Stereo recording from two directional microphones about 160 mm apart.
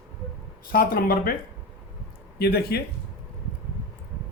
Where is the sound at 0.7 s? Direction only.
65° left (ahead or behind).